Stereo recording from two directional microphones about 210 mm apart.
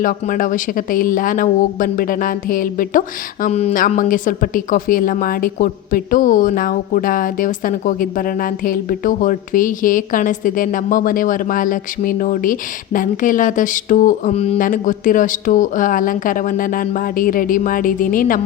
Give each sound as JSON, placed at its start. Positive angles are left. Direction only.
{"t": 0.0, "sound": "speech", "side_deg": 40}